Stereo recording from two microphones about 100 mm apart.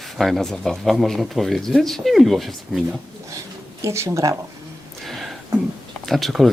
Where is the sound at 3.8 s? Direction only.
30° right (ahead or behind).